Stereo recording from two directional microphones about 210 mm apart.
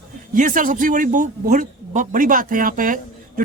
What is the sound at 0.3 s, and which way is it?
Speech, 40° right (ahead or behind).